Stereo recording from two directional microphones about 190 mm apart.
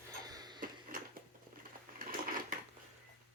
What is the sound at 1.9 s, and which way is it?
Sewing machine, 45° right (ahead or behind).